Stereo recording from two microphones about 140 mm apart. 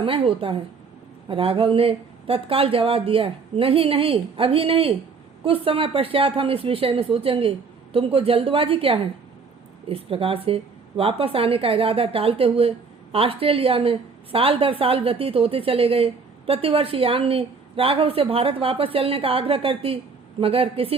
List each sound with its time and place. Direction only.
0.0 s a woman's voice: 40° right (ahead or behind)